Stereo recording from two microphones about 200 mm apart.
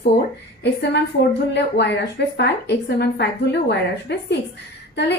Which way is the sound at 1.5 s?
60° left (ahead or behind).